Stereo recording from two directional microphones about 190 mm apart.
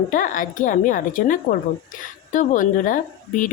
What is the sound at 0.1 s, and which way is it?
Speech, 45° left (ahead or behind).